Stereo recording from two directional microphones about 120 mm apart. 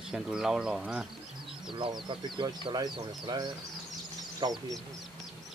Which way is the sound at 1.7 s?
45° right (ahead or behind).